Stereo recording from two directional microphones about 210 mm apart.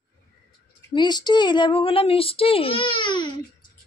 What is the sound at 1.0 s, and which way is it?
A child's voice, 20° left (ahead or behind).